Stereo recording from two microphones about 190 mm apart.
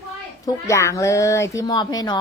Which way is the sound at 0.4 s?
15° left (ahead or behind).